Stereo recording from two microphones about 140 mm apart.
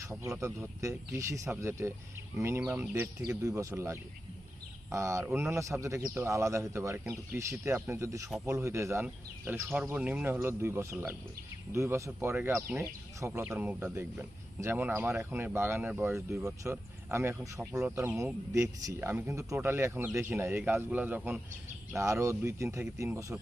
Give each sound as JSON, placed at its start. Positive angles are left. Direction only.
{"t": 0.0, "sound": "a man's voice", "side_deg": -20}